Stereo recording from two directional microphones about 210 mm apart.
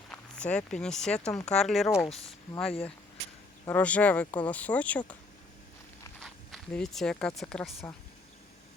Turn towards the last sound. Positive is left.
turn(degrees=0)  # may be behind; listen again after turning